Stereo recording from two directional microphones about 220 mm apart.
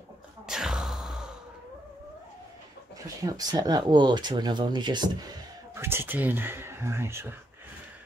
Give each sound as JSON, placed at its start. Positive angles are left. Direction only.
{"t": 0.5, "sound": "music", "side_deg": 0}
{"t": 3.3, "sound": "speech", "side_deg": -15}